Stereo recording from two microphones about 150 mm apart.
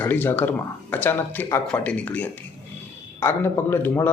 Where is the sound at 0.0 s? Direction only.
15° left (ahead or behind).